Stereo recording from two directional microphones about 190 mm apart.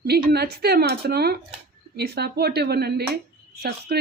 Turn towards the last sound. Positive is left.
turn(degrees=-55)  # may be behind; listen again after turning